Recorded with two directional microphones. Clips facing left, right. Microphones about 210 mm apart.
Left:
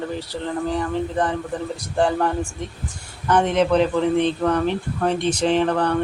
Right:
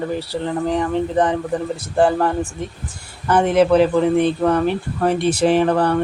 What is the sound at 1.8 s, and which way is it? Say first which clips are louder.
Speech: right 3 dB; 5° right (ahead or behind).